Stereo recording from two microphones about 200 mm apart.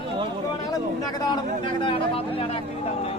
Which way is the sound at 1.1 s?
20° left (ahead or behind).